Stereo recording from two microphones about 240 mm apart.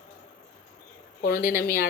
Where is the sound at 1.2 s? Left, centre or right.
Left.